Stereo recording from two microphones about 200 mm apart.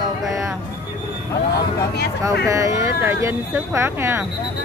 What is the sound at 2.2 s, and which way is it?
Speech, 15° right (ahead or behind).